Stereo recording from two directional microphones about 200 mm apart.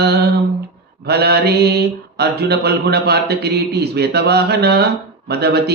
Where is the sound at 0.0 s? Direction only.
55° right (ahead or behind).